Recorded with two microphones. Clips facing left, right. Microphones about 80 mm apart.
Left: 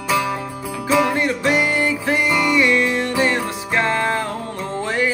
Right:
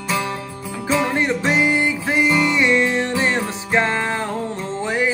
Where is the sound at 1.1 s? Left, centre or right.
Right.